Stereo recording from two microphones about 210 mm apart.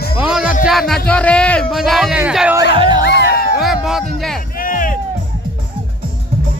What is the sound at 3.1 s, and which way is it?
Music, 55° left (ahead or behind).